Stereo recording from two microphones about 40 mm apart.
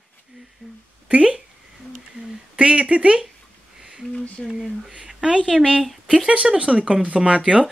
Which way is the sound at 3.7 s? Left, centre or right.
Centre.